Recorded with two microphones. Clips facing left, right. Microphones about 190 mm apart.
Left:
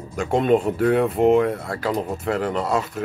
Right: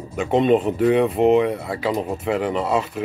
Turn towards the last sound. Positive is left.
turn(degrees=-5)  # may be behind; listen again after turning